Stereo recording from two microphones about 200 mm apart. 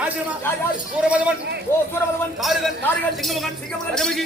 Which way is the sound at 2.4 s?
Centre (ahead or behind).